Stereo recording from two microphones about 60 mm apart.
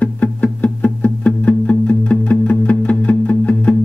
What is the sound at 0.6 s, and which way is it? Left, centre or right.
Music, left.